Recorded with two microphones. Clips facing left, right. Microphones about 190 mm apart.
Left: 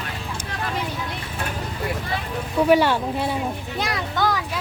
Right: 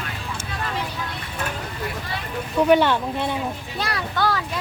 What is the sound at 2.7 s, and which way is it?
A child's voice, 10° left (ahead or behind).